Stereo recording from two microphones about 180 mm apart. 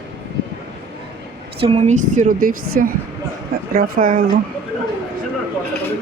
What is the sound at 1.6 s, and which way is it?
A woman's voice, 35° right (ahead or behind).